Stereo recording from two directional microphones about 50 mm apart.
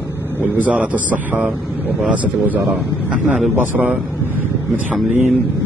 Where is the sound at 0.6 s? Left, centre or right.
Right.